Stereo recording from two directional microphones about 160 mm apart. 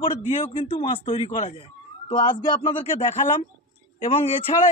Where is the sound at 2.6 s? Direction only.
30° left (ahead or behind).